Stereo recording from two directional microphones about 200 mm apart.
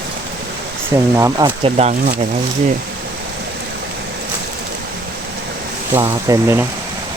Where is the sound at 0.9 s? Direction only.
15° right (ahead or behind).